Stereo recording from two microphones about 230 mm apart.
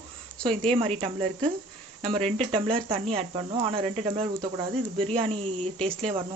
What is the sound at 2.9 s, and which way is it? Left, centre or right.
Speech, right.